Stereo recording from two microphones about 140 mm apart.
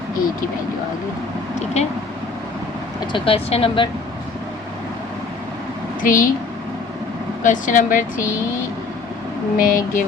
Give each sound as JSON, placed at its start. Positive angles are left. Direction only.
{"t": 1.5, "sound": "speech", "side_deg": 50}
{"t": 3.1, "sound": "speech", "side_deg": 40}
{"t": 6.0, "sound": "a child's voice", "side_deg": 80}
{"t": 7.4, "sound": "a woman's voice", "side_deg": 65}
{"t": 9.6, "sound": "speech", "side_deg": 90}